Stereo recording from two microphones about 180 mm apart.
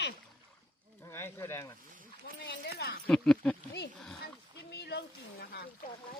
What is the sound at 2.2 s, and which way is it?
Speech, 75° left (ahead or behind).